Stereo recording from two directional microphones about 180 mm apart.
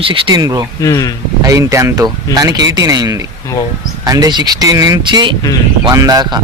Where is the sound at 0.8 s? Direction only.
20° left (ahead or behind).